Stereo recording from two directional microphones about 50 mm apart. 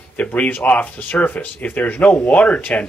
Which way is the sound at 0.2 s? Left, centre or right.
Left.